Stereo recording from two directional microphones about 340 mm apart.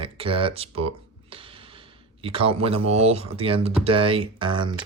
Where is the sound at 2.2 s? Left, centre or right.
Centre.